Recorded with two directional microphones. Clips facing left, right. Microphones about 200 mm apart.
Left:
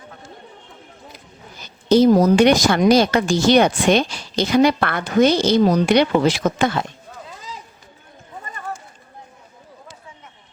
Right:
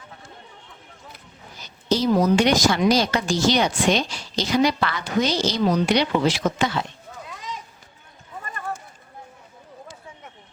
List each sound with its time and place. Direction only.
2.0 s speech: 45° left (ahead or behind)